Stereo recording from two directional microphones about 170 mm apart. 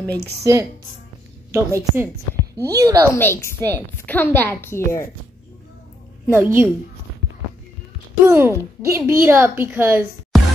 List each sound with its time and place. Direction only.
0.0 s a woman's voice: 10° left (ahead or behind)
0.4 s a woman's voice: 20° right (ahead or behind)
3.2 s a woman's voice: 15° left (ahead or behind)
6.3 s a woman's voice: 10° right (ahead or behind)
8.3 s a woman's voice: 15° right (ahead or behind)